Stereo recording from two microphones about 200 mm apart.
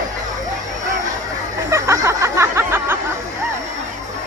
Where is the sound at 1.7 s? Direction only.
15° right (ahead or behind).